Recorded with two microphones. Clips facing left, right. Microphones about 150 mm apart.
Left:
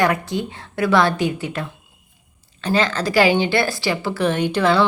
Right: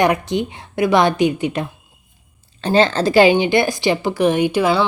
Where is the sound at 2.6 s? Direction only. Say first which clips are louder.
Right 5 dB; 30° right (ahead or behind); by 4.9 s 5° right (ahead or behind).